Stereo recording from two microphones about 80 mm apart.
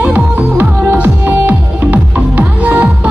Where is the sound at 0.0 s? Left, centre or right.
Right.